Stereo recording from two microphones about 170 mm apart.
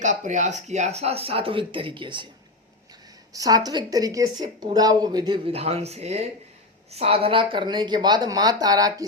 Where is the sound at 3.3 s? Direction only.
20° right (ahead or behind).